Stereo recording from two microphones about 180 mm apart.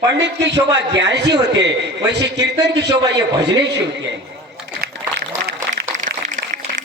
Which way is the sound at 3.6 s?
75° right (ahead or behind).